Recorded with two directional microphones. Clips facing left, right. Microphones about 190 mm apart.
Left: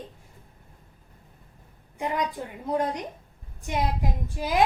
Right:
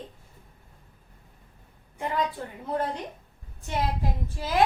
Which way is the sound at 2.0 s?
15° left (ahead or behind).